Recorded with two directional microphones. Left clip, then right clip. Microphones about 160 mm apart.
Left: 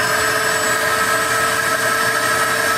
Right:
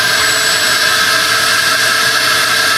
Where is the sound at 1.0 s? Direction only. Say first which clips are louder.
Right 5 dB; 20° left (ahead or behind).